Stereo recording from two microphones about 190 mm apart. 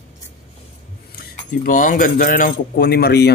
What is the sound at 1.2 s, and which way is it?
Speech, 50° left (ahead or behind).